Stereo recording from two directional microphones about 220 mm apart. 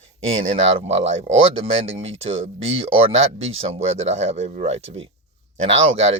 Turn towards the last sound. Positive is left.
turn(degrees=-25)  # may be behind; listen again after turning